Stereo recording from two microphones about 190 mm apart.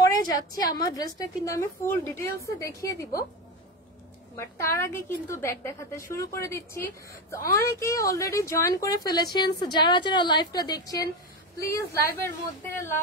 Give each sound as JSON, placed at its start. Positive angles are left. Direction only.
{"t": 0.3, "sound": "a woman's voice", "side_deg": 20}
{"t": 4.4, "sound": "a woman's voice", "side_deg": 15}